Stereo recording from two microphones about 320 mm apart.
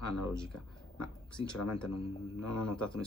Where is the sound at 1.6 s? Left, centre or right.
Left.